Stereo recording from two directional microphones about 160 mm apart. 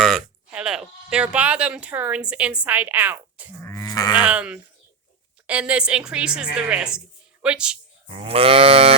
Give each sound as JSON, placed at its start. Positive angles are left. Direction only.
{"t": 0.0, "sound": "speech", "side_deg": 0}
{"t": 3.6, "sound": "livestock", "side_deg": 20}
{"t": 4.1, "sound": "a woman's voice", "side_deg": -10}
{"t": 8.0, "sound": "livestock", "side_deg": -35}